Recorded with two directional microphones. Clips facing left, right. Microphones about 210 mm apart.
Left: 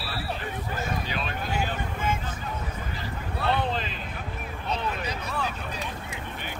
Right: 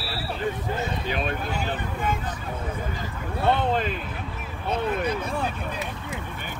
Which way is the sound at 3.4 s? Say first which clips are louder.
Right 5 dB; 50° right (ahead or behind).